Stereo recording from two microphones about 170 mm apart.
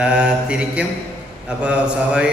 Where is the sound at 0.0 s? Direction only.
5° right (ahead or behind).